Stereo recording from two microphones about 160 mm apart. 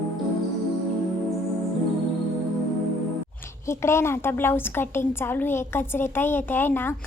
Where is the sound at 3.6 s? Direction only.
15° left (ahead or behind).